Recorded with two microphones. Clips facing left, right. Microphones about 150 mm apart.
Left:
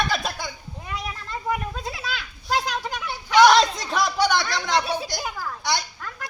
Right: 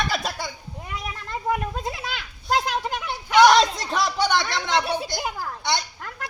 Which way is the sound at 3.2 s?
20° right (ahead or behind).